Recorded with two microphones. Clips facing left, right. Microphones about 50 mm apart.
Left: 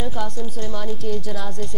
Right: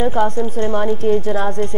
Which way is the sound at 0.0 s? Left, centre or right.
Right.